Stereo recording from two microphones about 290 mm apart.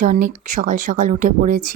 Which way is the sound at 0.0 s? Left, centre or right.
Right.